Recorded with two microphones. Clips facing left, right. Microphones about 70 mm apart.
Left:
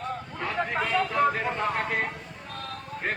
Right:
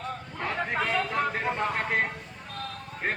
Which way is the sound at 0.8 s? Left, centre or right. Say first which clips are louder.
Left 4 dB; centre.